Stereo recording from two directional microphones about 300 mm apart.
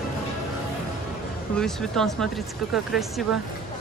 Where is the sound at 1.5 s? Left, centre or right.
Centre.